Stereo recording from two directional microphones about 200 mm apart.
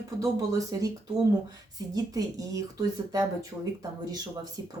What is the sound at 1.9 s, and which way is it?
Speech, 15° right (ahead or behind).